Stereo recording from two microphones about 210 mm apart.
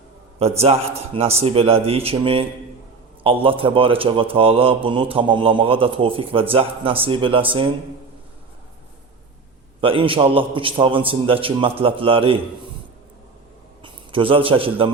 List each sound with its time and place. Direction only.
0.6 s speech: 30° right (ahead or behind)
9.8 s speech: 25° right (ahead or behind)
13.8 s a man's voice: 25° right (ahead or behind)